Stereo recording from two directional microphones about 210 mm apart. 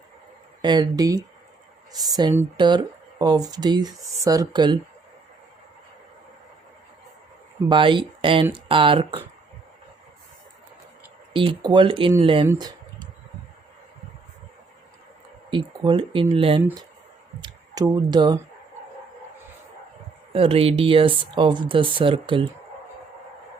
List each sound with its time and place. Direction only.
0.6 s speech: 20° right (ahead or behind)
7.7 s speech: 25° right (ahead or behind)
11.3 s speech: 25° right (ahead or behind)
15.4 s speech: 20° right (ahead or behind)
20.3 s speech: 25° right (ahead or behind)